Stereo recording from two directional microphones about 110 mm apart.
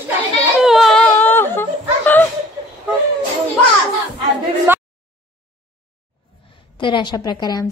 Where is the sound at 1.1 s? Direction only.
20° left (ahead or behind).